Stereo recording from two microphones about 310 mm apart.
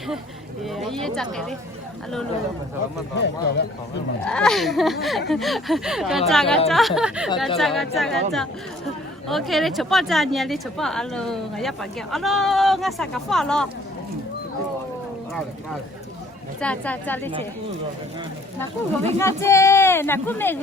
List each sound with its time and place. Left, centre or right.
0.6 s speech: centre
3.2 s speech: left
4.3 s speech: centre
16.6 s speech: centre
19.2 s speech: centre